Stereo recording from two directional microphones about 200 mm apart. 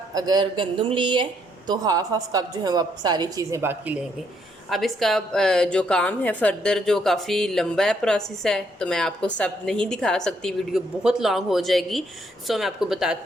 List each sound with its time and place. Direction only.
0.1 s speech: 20° right (ahead or behind)
4.7 s a woman's voice: centre (ahead or behind)